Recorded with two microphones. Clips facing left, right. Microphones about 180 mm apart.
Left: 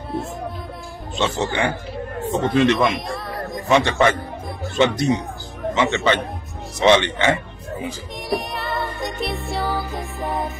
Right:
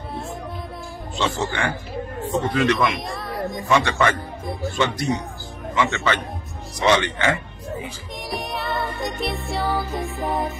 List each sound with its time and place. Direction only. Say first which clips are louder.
1.1 s speech: left 2 dB; 20° left (ahead or behind)
3.1 s music: even; centre (ahead or behind)
3.6 s speech: left 3 dB; 20° left (ahead or behind)
8.3 s music: left 3 dB; centre (ahead or behind)